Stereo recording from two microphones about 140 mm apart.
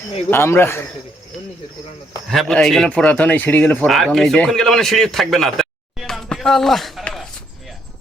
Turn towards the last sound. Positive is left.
turn(degrees=0)  # may be behind; listen again after turning